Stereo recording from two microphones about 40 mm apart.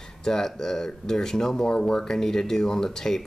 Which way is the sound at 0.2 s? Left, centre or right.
Centre.